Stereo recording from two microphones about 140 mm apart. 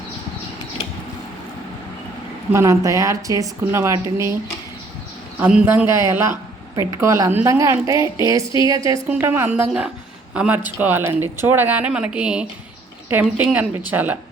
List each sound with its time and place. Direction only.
2.5 s a woman's voice: 20° right (ahead or behind)
5.4 s a woman's voice: 10° right (ahead or behind)
9.0 s speech: 10° right (ahead or behind)